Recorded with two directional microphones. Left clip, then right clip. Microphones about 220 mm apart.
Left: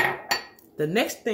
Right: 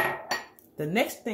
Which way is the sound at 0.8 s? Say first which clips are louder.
Left 3 dB; 25° right (ahead or behind).